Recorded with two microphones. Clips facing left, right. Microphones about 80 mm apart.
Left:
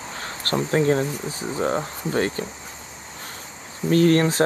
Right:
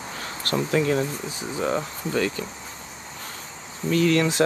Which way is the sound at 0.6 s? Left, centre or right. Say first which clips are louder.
Left 2 dB; left.